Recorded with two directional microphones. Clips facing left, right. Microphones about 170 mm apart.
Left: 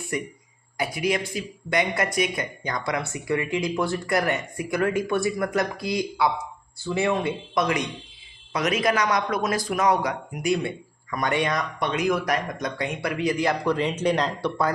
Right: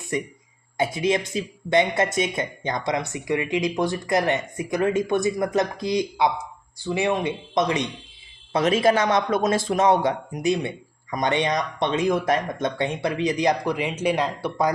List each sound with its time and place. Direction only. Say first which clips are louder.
0.1 s a man's voice: right 3 dB; 20° right (ahead or behind)